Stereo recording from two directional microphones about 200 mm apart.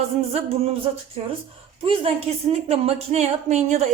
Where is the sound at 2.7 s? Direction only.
30° right (ahead or behind).